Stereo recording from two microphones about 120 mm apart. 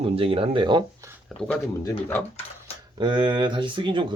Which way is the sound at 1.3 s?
10° left (ahead or behind).